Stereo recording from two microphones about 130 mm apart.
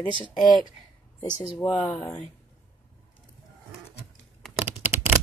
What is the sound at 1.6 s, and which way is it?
Speech, 30° left (ahead or behind).